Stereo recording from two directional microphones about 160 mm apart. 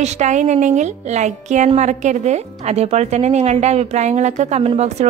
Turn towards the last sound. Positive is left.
turn(degrees=-45)  # may be behind; listen again after turning